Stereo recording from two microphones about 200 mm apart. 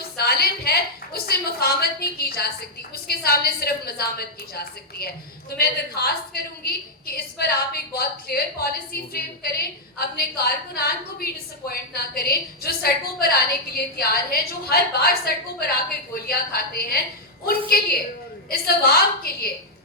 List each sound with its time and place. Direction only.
0.2 s a woman's voice: 50° left (ahead or behind)
18.5 s a woman's voice: 50° left (ahead or behind)